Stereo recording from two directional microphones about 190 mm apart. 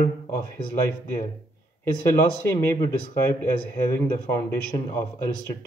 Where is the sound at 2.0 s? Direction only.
15° left (ahead or behind).